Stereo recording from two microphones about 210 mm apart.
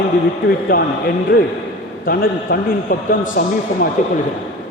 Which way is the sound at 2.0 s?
45° left (ahead or behind).